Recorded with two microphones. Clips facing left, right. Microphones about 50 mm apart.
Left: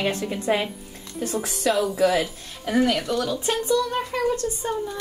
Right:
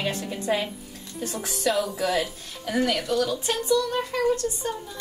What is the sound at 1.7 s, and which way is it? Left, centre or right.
Speech, centre.